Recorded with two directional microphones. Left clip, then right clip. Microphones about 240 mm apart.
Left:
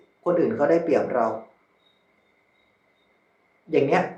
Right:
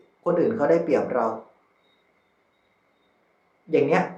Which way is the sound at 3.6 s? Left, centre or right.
Centre.